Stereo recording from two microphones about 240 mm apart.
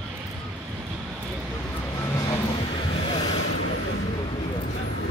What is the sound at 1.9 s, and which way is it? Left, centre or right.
Vehicle, centre.